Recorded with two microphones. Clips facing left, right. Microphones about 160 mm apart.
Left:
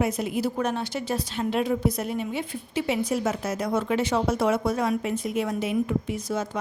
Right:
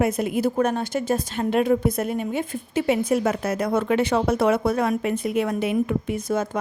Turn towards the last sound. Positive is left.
turn(degrees=-55)  # may be behind; listen again after turning